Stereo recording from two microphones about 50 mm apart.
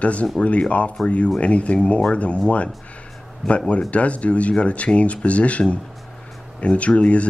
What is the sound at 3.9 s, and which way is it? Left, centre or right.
Speech, left.